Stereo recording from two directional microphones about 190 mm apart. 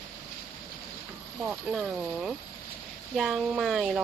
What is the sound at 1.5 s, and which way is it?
Speech, centre (ahead or behind).